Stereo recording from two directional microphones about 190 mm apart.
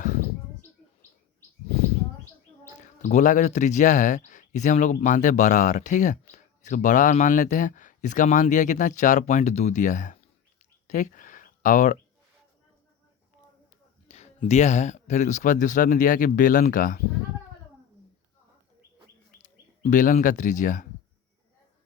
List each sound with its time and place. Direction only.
2.8 s speech: 40° left (ahead or behind)
10.6 s a sound: 40° left (ahead or behind)
14.1 s speech: 35° left (ahead or behind)
19.4 s speech: 40° left (ahead or behind)